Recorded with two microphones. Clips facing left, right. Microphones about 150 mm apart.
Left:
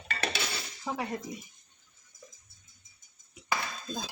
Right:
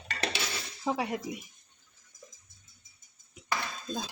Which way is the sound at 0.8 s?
15° right (ahead or behind).